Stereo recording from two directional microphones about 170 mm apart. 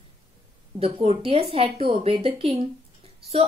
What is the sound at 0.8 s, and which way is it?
Speech, 35° right (ahead or behind).